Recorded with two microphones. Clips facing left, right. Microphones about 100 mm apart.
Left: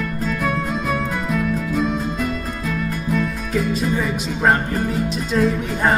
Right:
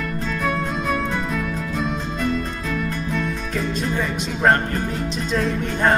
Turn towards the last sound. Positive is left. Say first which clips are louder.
# left 1 dB
turn(degrees=0)  # may be behind; listen again after turning